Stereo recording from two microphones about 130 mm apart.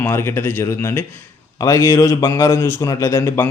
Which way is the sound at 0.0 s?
20° left (ahead or behind).